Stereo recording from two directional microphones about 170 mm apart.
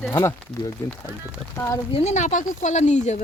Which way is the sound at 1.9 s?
40° left (ahead or behind).